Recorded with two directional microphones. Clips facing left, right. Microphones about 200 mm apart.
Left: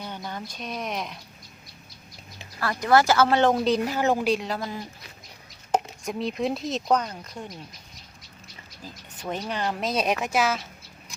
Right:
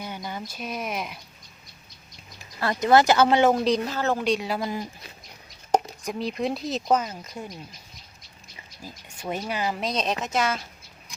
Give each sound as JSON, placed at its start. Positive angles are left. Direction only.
{"t": 0.3, "sound": "speech", "side_deg": -5}
{"t": 2.6, "sound": "speech", "side_deg": -20}
{"t": 3.5, "sound": "speech", "side_deg": 0}
{"t": 3.8, "sound": "a woman's voice", "side_deg": 15}
{"t": 4.3, "sound": "speech", "side_deg": -5}
{"t": 6.1, "sound": "speech", "side_deg": 0}
{"t": 8.8, "sound": "speech", "side_deg": -10}